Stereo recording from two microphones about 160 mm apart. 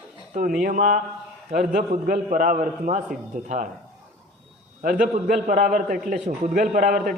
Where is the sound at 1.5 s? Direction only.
70° right (ahead or behind); by 3.7 s 50° right (ahead or behind).